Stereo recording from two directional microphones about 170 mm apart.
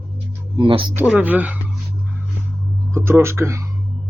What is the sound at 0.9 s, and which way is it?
Speech, 10° right (ahead or behind).